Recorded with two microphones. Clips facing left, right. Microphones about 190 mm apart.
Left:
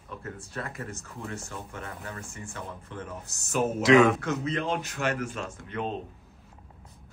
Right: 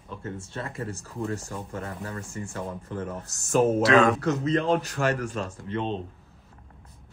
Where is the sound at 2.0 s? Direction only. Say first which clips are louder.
Right 5 dB; 40° right (ahead or behind).